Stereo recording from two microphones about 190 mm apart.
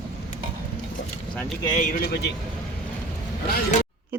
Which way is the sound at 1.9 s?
55° left (ahead or behind).